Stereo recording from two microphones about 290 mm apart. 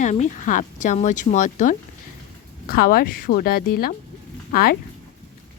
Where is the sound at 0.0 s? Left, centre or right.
Left.